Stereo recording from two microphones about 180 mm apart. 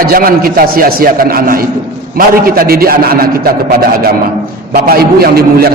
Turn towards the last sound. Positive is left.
turn(degrees=-60)  # may be behind; listen again after turning